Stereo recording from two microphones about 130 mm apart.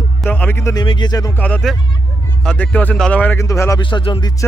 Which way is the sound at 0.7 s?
35° left (ahead or behind).